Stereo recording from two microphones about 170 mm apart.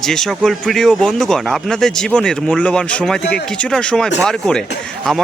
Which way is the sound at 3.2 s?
75° left (ahead or behind).